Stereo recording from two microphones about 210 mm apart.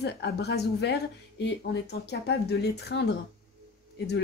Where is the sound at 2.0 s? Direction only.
50° left (ahead or behind).